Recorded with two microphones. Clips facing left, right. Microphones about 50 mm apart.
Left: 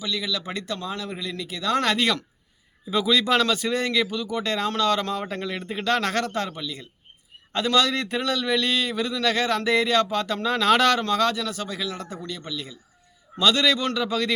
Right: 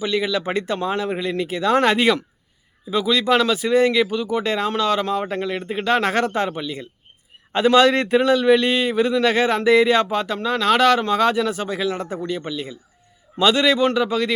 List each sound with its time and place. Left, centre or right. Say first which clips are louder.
0.0 s speech: right 7 dB; right; by 2.2 s centre
2.9 s speech: right 3 dB; centre; by 9.6 s right
9.6 s speech: right 7 dB; centre